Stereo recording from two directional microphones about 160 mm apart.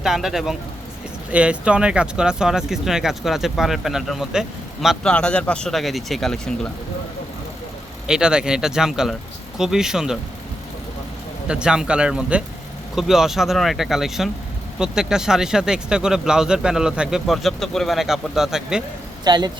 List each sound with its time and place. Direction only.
0.0 s speech: centre (ahead or behind)
8.0 s speech: 5° right (ahead or behind)
11.4 s speech: 5° right (ahead or behind)
19.2 s speech: 25° right (ahead or behind)